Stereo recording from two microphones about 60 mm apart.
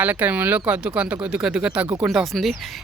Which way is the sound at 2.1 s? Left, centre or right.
Centre.